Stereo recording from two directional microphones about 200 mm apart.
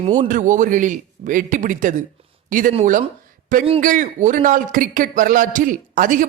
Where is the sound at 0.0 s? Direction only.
40° right (ahead or behind).